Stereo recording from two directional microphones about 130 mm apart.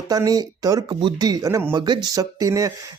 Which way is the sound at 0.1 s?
30° right (ahead or behind).